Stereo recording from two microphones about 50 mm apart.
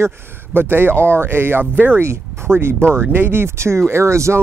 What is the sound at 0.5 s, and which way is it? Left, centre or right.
Speech, right.